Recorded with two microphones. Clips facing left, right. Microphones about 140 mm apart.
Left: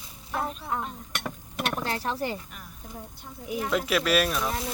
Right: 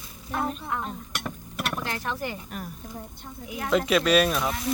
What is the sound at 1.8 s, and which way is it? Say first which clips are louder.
Speech: left 2 dB; 30° left (ahead or behind).